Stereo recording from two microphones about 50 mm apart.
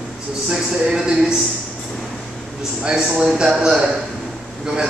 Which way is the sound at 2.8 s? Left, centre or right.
Centre.